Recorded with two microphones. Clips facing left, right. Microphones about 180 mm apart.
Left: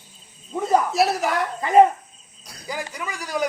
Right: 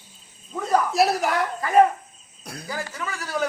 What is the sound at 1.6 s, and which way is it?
Speech, 20° left (ahead or behind).